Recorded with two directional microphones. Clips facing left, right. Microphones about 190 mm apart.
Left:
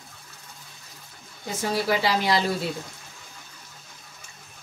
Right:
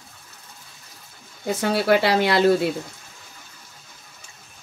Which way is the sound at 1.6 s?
65° right (ahead or behind).